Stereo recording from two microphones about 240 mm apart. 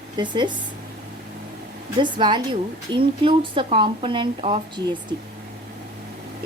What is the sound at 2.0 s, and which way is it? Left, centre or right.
Speech, centre.